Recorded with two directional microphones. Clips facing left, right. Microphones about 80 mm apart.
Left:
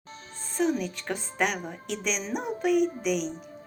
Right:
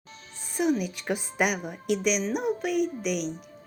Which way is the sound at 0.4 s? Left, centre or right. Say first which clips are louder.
Right 1 dB; centre.